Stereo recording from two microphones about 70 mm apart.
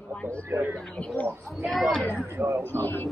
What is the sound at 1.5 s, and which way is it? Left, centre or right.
Speech, centre.